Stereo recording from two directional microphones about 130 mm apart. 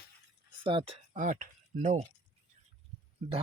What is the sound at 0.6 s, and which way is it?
Speech, 40° right (ahead or behind).